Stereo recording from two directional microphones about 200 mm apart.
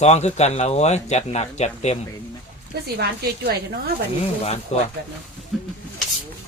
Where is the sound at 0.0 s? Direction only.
35° left (ahead or behind).